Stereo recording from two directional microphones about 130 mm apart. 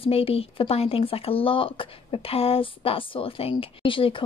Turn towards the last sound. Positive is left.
turn(degrees=40)  # may be behind; listen again after turning